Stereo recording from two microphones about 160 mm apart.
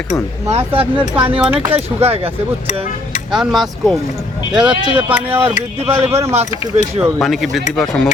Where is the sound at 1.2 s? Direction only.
35° right (ahead or behind).